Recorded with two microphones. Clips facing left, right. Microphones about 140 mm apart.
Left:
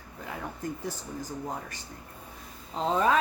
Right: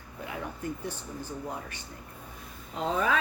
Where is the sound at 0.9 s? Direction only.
40° left (ahead or behind).